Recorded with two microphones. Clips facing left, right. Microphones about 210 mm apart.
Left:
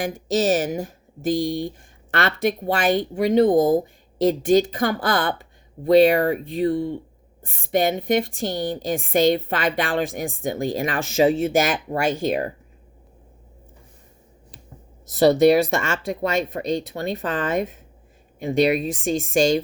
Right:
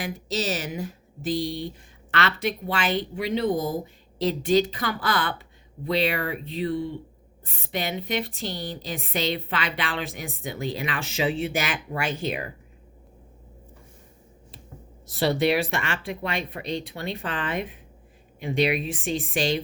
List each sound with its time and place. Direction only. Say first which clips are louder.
0.0 s a woman's voice: left 7 dB; 50° left (ahead or behind)
15.0 s a woman's voice: left 8 dB; 45° left (ahead or behind)